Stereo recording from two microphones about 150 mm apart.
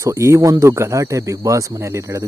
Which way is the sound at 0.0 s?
20° right (ahead or behind).